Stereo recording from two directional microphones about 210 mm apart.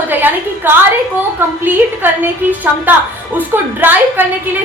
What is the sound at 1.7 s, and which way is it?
A woman's voice, 10° right (ahead or behind).